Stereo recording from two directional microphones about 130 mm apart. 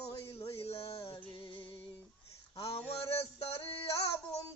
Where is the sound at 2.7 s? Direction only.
50° left (ahead or behind).